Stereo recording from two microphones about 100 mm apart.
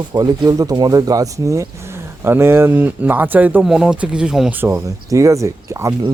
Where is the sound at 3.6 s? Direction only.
5° right (ahead or behind).